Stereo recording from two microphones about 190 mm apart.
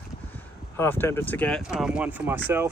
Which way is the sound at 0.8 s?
10° left (ahead or behind).